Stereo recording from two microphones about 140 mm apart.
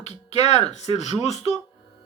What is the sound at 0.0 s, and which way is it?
Speech, 50° left (ahead or behind).